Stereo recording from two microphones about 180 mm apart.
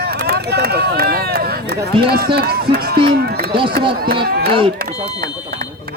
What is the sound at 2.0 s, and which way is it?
Speech, 60° right (ahead or behind).